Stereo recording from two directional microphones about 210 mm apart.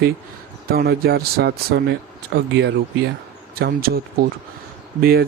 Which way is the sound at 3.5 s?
45° right (ahead or behind).